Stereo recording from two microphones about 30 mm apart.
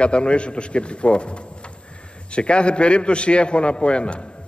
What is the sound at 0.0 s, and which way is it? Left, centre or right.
A man's voice, left.